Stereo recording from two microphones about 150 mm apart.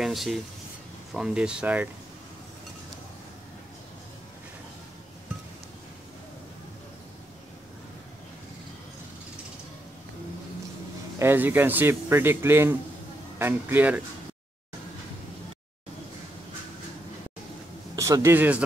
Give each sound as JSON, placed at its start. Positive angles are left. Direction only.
{"t": 0.0, "sound": "speech", "side_deg": 0}
{"t": 11.1, "sound": "speech", "side_deg": -15}
{"t": 17.9, "sound": "a man's voice", "side_deg": -20}